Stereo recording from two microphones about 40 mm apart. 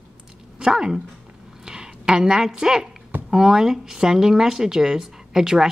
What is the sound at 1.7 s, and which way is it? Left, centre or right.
A woman's voice, centre.